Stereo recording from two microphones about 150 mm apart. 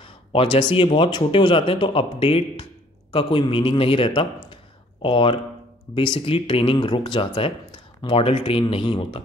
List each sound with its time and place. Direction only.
0.0 s speech: 35° left (ahead or behind)